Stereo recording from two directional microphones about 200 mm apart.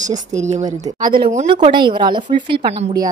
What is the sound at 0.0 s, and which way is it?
Speech, 35° right (ahead or behind).